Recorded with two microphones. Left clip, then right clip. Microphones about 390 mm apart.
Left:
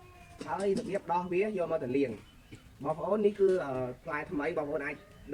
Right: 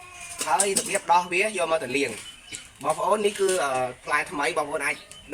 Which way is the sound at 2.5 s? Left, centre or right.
Right.